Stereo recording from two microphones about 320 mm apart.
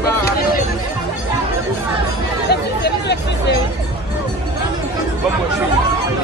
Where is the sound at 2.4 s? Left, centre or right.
Left.